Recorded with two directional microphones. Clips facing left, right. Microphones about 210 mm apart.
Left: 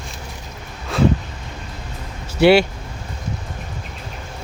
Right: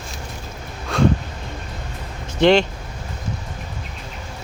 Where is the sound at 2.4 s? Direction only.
10° left (ahead or behind).